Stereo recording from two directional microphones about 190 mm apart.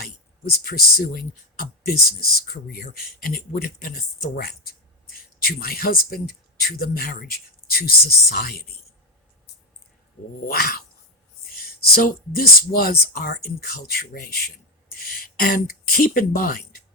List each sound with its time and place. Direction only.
0.0 s speech: 50° left (ahead or behind)
10.4 s speech: 55° left (ahead or behind)